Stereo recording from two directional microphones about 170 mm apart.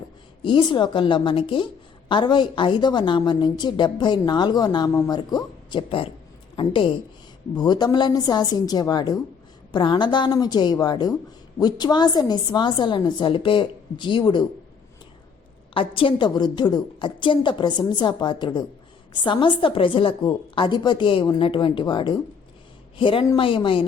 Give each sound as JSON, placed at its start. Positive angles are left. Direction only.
{"t": 0.4, "sound": "a woman's voice", "side_deg": 25}
{"t": 15.7, "sound": "a woman's voice", "side_deg": 30}